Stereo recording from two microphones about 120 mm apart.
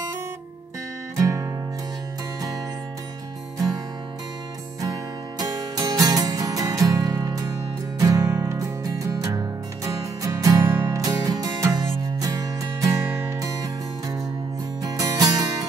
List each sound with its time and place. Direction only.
1.1 s music: 25° right (ahead or behind)
3.5 s music: 30° right (ahead or behind)
5.4 s music: 30° right (ahead or behind)